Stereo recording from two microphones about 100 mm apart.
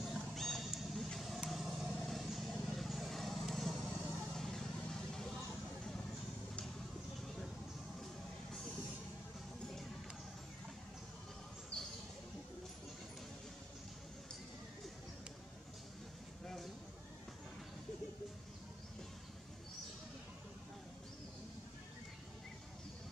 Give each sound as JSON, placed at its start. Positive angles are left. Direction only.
{"t": 0.0, "sound": "vehicle", "side_deg": 5}
{"t": 3.9, "sound": "vehicle", "side_deg": 20}
{"t": 4.4, "sound": "vehicle", "side_deg": 5}
{"t": 11.7, "sound": "a sound", "side_deg": 10}